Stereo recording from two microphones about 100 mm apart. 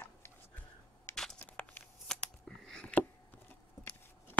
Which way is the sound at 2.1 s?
5° left (ahead or behind).